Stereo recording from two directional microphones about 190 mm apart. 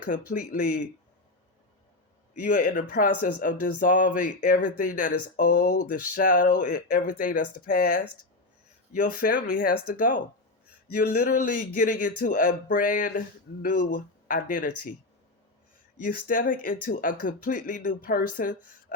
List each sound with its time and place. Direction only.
0.1 s speech: 45° left (ahead or behind)
2.4 s speech: 45° left (ahead or behind)
16.0 s speech: 45° left (ahead or behind)